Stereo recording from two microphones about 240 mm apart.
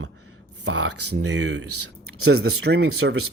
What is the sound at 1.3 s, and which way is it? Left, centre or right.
Speech, right.